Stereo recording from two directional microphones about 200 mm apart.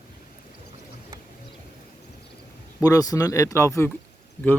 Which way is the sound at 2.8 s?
15° left (ahead or behind).